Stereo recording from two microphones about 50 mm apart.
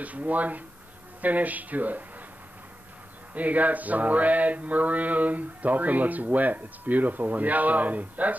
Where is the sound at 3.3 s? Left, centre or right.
Right.